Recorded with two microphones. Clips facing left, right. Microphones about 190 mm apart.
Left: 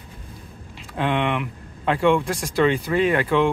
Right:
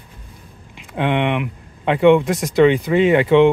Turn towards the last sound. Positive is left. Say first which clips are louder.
# right 7 dB
turn(degrees=-25)  # may be behind; listen again after turning